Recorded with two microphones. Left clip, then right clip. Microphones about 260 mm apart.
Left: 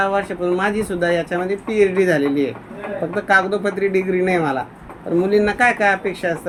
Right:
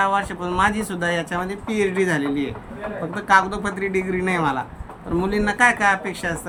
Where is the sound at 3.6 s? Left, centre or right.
Centre.